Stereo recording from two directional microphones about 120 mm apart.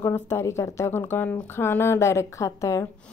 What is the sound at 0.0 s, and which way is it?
Speech, 20° left (ahead or behind).